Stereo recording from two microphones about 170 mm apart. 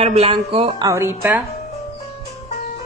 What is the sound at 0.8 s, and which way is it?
Speech, 15° right (ahead or behind).